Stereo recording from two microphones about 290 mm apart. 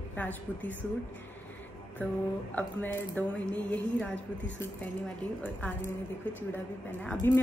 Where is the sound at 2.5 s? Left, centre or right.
Centre.